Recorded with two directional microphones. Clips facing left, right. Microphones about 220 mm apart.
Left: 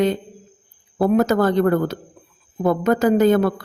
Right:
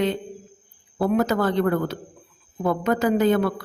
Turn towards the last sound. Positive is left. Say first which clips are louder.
# left 4 dB
turn(degrees=45)  # may be behind; listen again after turning